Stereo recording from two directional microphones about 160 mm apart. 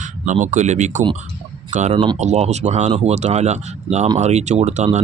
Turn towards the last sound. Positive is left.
turn(degrees=-45)  # may be behind; listen again after turning